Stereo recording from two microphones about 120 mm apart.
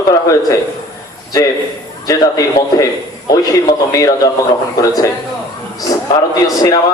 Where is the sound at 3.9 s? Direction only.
30° left (ahead or behind).